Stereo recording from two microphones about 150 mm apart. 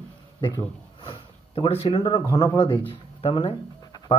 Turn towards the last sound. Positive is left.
turn(degrees=35)  # may be behind; listen again after turning